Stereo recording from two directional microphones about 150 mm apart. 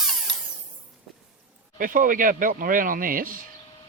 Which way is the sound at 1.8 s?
65° right (ahead or behind).